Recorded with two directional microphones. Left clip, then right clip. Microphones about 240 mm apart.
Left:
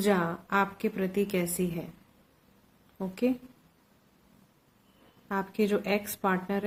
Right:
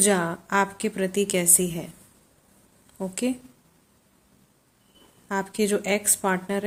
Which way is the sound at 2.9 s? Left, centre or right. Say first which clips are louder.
Right 2 dB; centre.